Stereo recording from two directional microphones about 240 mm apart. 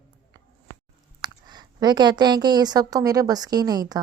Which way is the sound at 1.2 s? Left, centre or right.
Centre.